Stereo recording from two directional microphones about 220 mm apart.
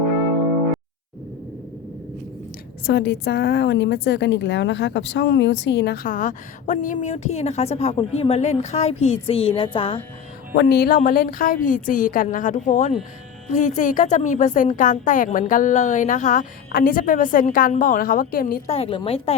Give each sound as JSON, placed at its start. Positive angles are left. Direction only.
{"t": 2.8, "sound": "a woman's voice", "side_deg": 50}
{"t": 10.5, "sound": "a woman's voice", "side_deg": 45}
{"t": 18.7, "sound": "a woman's voice", "side_deg": 25}